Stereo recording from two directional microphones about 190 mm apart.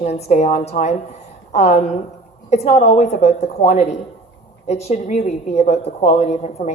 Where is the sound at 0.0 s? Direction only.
35° left (ahead or behind).